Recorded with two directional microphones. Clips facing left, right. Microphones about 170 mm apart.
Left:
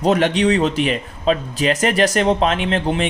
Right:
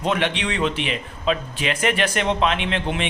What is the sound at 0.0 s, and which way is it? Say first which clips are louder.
A man's voice: left 7 dB; 40° left (ahead or behind).